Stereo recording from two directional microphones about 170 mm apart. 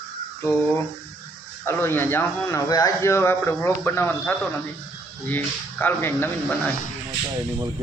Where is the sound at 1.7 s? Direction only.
15° left (ahead or behind).